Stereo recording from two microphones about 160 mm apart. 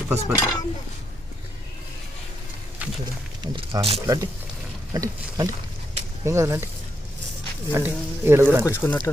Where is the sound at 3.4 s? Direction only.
30° right (ahead or behind).